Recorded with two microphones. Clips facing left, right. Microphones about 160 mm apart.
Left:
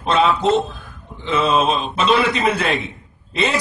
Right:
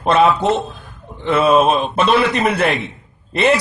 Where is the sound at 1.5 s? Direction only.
50° right (ahead or behind).